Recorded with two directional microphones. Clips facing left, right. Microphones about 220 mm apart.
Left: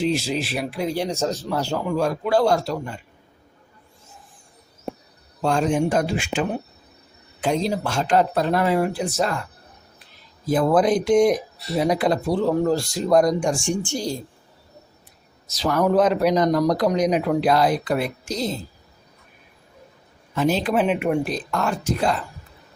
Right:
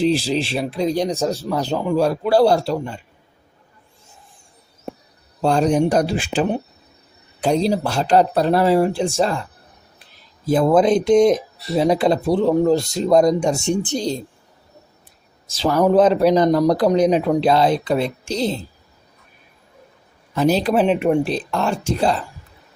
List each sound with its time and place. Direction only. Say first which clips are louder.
0.0 s speech: right 4 dB; 30° right (ahead or behind); by 1.8 s 15° right (ahead or behind)
1.9 s speech: right 4 dB; 35° right (ahead or behind)
5.4 s speech: right 4 dB; 35° right (ahead or behind)
10.4 s speech: right 3 dB; 25° right (ahead or behind)
15.5 s speech: right 4 dB; 30° right (ahead or behind)
20.3 s speech: right 4 dB; 35° right (ahead or behind)